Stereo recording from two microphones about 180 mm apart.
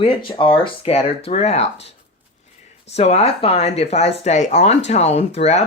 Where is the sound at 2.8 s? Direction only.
35° left (ahead or behind).